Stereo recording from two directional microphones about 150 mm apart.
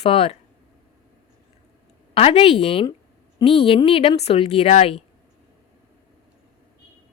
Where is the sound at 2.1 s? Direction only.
40° left (ahead or behind).